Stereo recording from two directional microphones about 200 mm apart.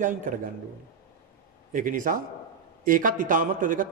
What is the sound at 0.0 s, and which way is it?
Speech, 40° right (ahead or behind).